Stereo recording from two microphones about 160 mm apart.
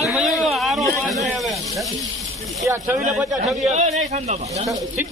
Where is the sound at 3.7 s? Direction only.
45° right (ahead or behind).